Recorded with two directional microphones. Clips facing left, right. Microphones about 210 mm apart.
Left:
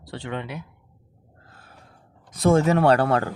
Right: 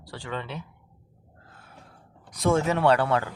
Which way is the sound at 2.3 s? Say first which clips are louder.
Left 5 dB; 35° left (ahead or behind).